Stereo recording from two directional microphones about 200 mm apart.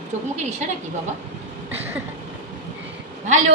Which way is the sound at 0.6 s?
35° right (ahead or behind).